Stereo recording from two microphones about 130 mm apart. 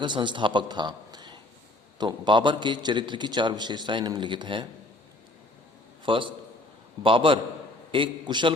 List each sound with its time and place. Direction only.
0.0 s a man's voice: 35° right (ahead or behind)
6.1 s a man's voice: 40° right (ahead or behind)